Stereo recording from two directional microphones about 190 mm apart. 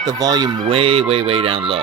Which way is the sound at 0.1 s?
20° right (ahead or behind).